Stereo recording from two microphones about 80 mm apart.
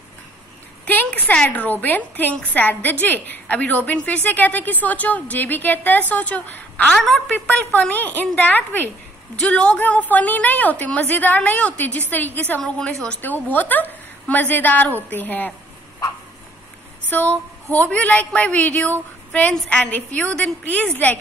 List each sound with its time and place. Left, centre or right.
0.8 s a sound: left
1.5 s a woman's voice: left
6.9 s a woman's voice: centre
7.3 s a woman's voice: left
17.1 s a woman's voice: left
19.5 s a woman's voice: centre
19.9 s a woman's voice: left